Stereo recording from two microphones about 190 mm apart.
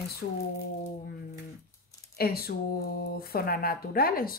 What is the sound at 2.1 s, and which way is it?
Speech, 55° left (ahead or behind).